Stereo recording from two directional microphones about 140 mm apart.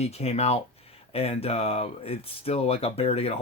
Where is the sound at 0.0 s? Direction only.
50° left (ahead or behind).